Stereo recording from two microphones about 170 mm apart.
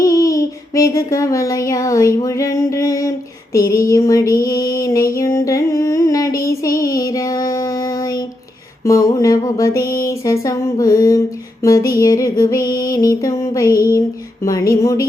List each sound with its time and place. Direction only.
0.0 s a sound: 20° left (ahead or behind)
3.5 s music: 20° left (ahead or behind)
6.4 s child singing: 20° left (ahead or behind)
8.8 s music: 20° left (ahead or behind)
9.8 s music: 55° left (ahead or behind)
10.1 s music: 20° left (ahead or behind)